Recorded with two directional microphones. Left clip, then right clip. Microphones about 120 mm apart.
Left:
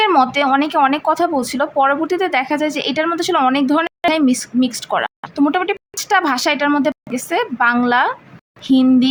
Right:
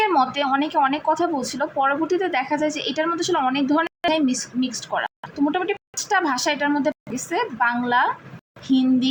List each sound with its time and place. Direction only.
0.0 s speech: 45° left (ahead or behind)